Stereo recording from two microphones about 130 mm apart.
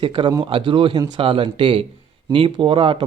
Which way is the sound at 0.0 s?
40° right (ahead or behind).